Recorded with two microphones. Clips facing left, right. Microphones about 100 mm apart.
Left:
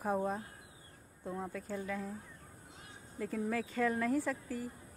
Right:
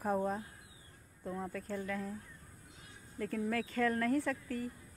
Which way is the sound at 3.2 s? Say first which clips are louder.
Even; 10° left (ahead or behind).